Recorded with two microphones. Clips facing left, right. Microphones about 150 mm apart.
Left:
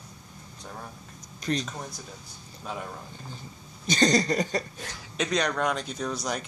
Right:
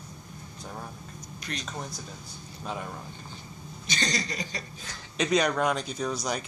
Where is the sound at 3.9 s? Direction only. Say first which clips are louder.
Left 9 dB; 45° left (ahead or behind).